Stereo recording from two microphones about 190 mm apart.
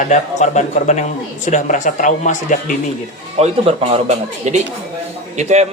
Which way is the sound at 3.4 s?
30° right (ahead or behind).